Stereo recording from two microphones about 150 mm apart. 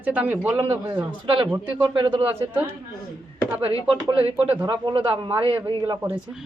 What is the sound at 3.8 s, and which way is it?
A man's voice, 25° right (ahead or behind).